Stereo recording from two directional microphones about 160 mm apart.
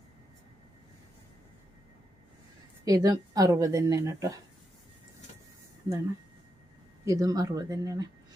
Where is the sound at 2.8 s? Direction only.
25° right (ahead or behind).